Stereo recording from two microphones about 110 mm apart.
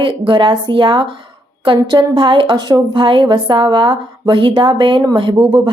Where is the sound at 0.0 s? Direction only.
50° right (ahead or behind).